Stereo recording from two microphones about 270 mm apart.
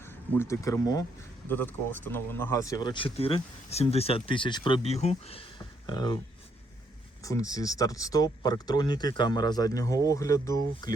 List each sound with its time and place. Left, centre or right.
0.3 s speech: centre
7.3 s speech: centre